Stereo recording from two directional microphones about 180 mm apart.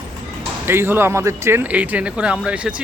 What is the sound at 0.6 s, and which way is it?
Speech, 10° right (ahead or behind).